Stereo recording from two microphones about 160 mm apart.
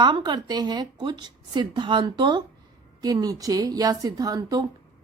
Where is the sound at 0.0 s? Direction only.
30° right (ahead or behind).